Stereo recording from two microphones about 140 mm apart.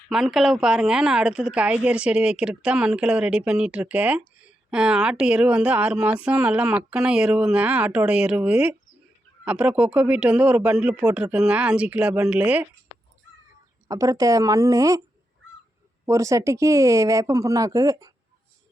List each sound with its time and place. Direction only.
0.1 s a woman's voice: centre (ahead or behind)
13.8 s speech: 25° right (ahead or behind)
16.0 s speech: 20° right (ahead or behind)